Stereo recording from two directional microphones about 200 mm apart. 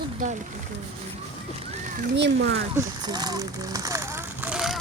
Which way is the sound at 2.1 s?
60° right (ahead or behind).